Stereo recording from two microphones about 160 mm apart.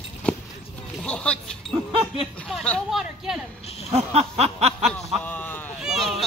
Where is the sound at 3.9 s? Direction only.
40° right (ahead or behind).